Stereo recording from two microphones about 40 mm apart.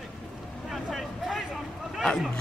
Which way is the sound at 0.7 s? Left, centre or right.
Centre.